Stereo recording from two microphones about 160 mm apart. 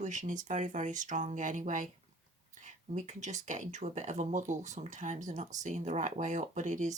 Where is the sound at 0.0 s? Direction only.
50° right (ahead or behind).